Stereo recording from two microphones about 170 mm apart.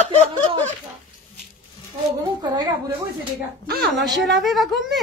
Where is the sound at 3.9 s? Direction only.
Centre (ahead or behind).